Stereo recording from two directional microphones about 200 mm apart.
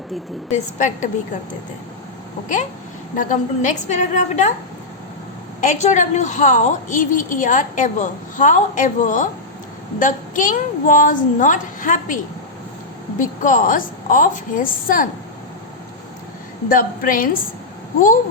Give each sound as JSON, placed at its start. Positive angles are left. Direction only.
{"t": 0.5, "sound": "a woman's voice", "side_deg": 40}
{"t": 3.2, "sound": "a woman's voice", "side_deg": 40}
{"t": 5.5, "sound": "a woman's voice", "side_deg": 35}
{"t": 16.6, "sound": "a woman's voice", "side_deg": 45}